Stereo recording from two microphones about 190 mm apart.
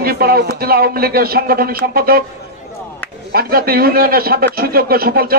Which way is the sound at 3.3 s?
50° right (ahead or behind).